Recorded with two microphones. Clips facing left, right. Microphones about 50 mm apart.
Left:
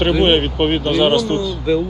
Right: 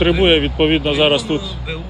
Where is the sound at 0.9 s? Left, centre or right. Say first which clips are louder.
Even; centre.